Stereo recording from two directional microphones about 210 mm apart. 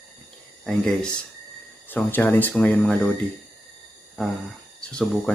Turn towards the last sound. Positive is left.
turn(degrees=5)  # may be behind; listen again after turning